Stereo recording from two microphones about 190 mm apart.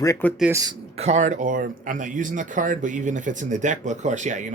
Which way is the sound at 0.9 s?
35° right (ahead or behind).